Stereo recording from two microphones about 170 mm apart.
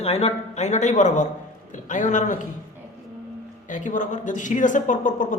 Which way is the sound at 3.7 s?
50° left (ahead or behind).